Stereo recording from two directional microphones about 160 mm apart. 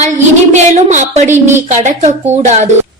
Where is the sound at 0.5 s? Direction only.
45° right (ahead or behind).